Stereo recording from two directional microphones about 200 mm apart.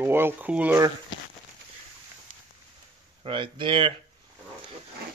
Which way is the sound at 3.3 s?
25° right (ahead or behind).